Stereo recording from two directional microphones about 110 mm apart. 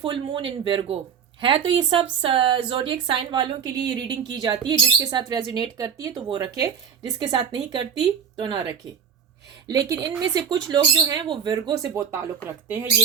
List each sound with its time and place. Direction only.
0.0 s speech: 45° right (ahead or behind)
4.8 s speech: 30° right (ahead or behind)
5.1 s speech: 40° right (ahead or behind)
9.6 s speech: 35° right (ahead or behind)
12.6 s speech: 15° right (ahead or behind)